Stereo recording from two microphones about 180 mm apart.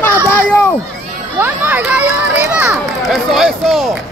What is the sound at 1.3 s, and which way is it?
Speech, 10° right (ahead or behind).